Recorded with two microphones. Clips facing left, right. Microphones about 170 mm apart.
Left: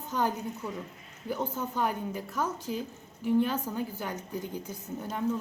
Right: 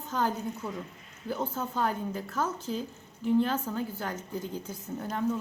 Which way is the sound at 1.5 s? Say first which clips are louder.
Even; 15° left (ahead or behind).